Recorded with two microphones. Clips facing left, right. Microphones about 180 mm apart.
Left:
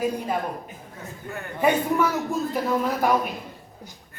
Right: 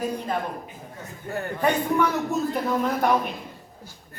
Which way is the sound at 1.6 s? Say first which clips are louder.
Left 1 dB; 5° left (ahead or behind).